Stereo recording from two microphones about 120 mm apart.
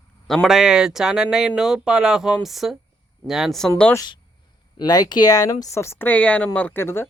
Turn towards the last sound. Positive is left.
turn(degrees=20)  # may be behind; listen again after turning